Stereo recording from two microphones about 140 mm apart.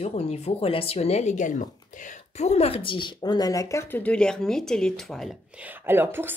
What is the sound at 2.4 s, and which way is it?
Speech, 45° left (ahead or behind).